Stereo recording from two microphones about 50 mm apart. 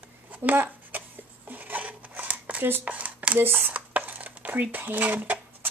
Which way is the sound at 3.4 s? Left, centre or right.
Right.